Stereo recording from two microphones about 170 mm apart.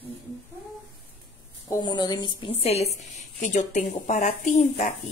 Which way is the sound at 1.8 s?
25° left (ahead or behind).